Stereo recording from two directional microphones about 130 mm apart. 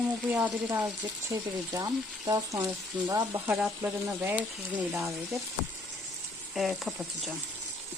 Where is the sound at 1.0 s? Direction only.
30° right (ahead or behind); by 4.9 s 10° right (ahead or behind).